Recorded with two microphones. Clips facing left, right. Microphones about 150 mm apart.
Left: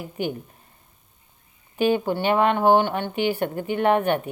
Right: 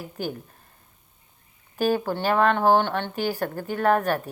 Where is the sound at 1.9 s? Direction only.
20° left (ahead or behind).